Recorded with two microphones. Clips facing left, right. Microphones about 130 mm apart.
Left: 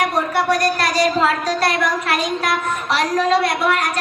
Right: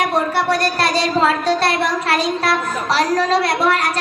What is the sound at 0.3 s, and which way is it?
Speech, 30° right (ahead or behind).